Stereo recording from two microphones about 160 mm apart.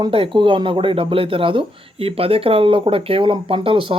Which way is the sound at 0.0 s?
30° right (ahead or behind).